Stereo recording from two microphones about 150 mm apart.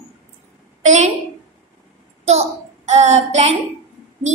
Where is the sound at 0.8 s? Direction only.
50° right (ahead or behind).